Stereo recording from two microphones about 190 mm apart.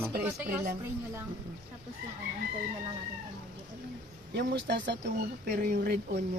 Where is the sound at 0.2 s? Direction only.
10° right (ahead or behind).